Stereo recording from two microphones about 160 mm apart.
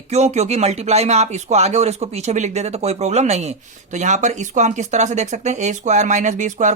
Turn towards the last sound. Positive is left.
turn(degrees=-50)  # may be behind; listen again after turning